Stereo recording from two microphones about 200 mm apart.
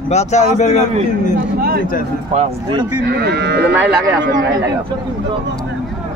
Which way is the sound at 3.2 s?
55° right (ahead or behind).